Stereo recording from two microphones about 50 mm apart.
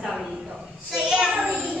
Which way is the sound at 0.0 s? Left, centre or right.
Centre.